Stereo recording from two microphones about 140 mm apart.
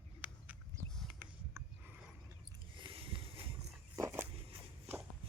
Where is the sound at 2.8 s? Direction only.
40° right (ahead or behind).